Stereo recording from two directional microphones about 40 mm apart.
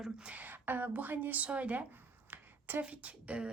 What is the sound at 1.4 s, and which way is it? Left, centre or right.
Speech, right.